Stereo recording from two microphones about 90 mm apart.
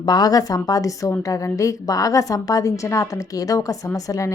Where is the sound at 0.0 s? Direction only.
50° left (ahead or behind).